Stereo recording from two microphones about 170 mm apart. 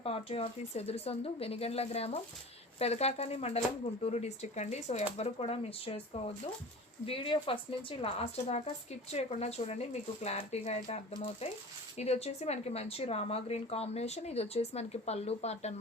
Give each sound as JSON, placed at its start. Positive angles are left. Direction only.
{"t": 0.0, "sound": "speech", "side_deg": 35}